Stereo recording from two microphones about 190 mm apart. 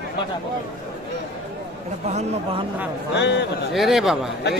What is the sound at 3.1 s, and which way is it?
Speech, 65° left (ahead or behind).